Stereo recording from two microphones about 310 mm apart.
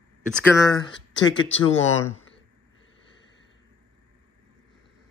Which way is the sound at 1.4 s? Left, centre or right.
Left.